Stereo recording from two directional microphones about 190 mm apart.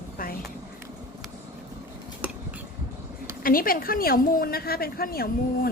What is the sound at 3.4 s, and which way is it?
A woman's voice, 50° left (ahead or behind).